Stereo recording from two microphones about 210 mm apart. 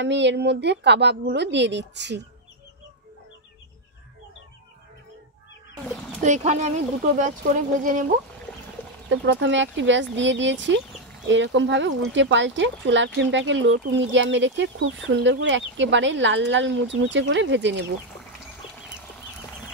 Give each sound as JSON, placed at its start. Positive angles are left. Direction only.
{"t": 0.0, "sound": "speech", "side_deg": -55}
{"t": 6.2, "sound": "speech", "side_deg": -35}
{"t": 9.1, "sound": "speech", "side_deg": -60}